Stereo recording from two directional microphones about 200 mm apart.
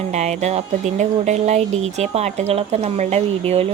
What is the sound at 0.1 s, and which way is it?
A woman's voice, 35° right (ahead or behind).